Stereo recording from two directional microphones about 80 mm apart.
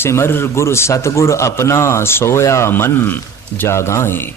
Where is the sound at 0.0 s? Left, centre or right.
Left.